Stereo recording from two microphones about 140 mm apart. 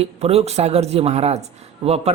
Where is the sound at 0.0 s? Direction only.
45° right (ahead or behind).